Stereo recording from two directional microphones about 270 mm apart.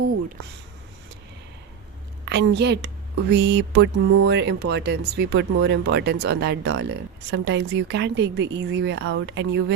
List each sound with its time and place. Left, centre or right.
2.2 s speech: right